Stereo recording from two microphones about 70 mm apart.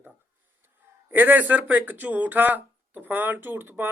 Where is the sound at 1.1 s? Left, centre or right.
Right.